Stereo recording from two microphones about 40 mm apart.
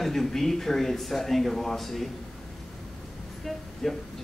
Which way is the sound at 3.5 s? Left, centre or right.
Centre.